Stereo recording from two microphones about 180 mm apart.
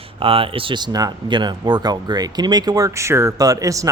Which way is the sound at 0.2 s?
30° right (ahead or behind).